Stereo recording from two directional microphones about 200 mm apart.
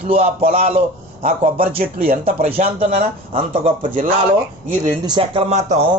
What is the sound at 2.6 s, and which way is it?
Speech, 45° right (ahead or behind).